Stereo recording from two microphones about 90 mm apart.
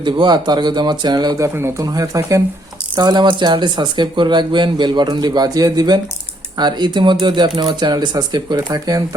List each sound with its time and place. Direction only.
0.0 s speech: 55° right (ahead or behind)
1.4 s a man's voice: 30° right (ahead or behind)
1.8 s speech: 45° right (ahead or behind)
2.9 s speech: 50° right (ahead or behind)